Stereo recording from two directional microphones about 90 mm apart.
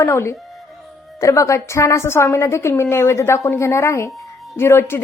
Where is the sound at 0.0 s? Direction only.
30° left (ahead or behind).